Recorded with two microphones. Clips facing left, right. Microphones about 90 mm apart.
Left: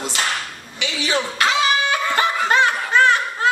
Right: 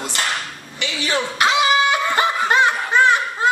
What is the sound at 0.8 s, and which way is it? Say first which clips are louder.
Speech: even; 55° right (ahead or behind).